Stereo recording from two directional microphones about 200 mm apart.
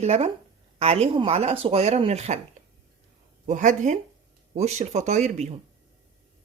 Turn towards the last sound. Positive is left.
turn(degrees=-35)  # may be behind; listen again after turning